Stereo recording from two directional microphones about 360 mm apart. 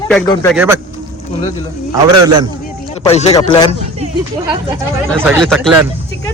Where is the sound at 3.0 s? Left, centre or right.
Centre.